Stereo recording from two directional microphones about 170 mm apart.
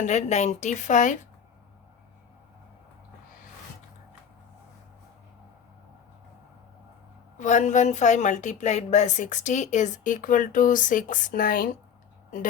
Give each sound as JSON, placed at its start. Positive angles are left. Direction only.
{"t": 0.0, "sound": "speech", "side_deg": 45}
{"t": 7.3, "sound": "speech", "side_deg": 45}